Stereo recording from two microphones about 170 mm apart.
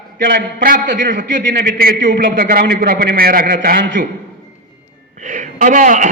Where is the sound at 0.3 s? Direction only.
55° right (ahead or behind).